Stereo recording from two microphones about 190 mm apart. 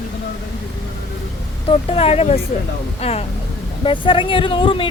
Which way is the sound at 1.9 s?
30° left (ahead or behind).